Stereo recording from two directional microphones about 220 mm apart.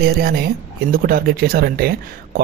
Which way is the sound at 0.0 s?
45° right (ahead or behind).